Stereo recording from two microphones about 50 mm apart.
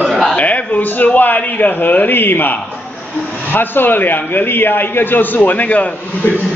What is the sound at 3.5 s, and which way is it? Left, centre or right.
A man's voice, left.